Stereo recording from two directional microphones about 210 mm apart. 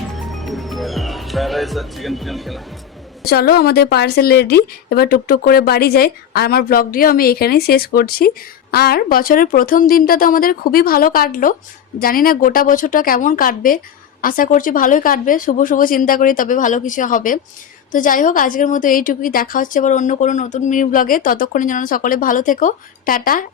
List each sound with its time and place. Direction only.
0.1 s music: centre (ahead or behind)
3.2 s a woman's voice: 45° left (ahead or behind)